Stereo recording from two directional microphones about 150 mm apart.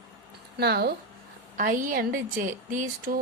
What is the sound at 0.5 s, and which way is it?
Speech, 90° right.